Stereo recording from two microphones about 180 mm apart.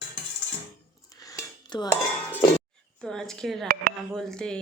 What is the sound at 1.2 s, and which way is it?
Dishes, 20° left (ahead or behind).